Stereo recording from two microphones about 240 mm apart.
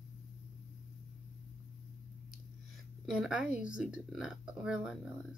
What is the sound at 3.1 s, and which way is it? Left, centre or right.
Speech, centre.